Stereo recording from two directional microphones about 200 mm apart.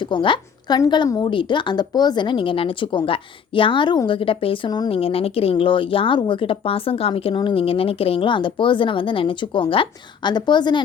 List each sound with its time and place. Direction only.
0.1 s a woman's voice: 25° left (ahead or behind)